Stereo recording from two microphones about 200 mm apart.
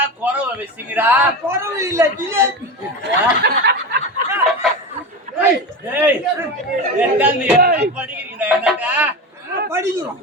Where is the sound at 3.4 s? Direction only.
55° right (ahead or behind).